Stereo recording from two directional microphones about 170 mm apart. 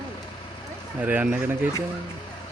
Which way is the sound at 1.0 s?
10° right (ahead or behind).